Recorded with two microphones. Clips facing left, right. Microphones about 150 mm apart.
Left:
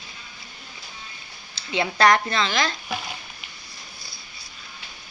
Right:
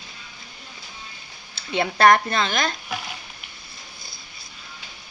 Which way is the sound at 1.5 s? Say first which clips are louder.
Right 1 dB; 50° right (ahead or behind).